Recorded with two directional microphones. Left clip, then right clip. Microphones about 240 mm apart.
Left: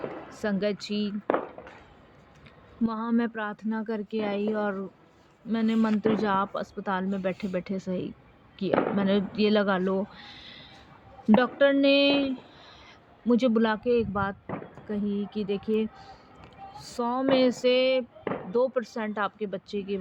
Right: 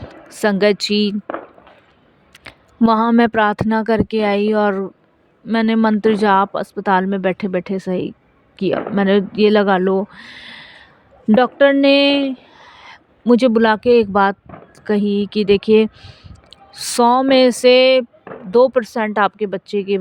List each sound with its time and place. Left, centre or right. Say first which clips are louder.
0.3 s speech: right 15 dB; right
2.4 s speech: right 14 dB; right